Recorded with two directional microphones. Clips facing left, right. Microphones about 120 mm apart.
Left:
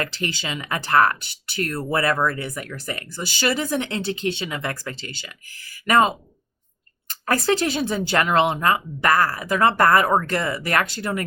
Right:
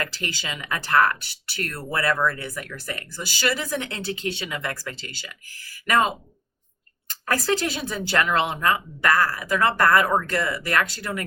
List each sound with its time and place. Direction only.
0.0 s speech: 30° left (ahead or behind)
7.4 s speech: 30° left (ahead or behind)